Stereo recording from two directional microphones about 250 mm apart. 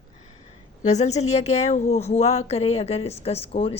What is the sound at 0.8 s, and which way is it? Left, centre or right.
A woman's voice, left.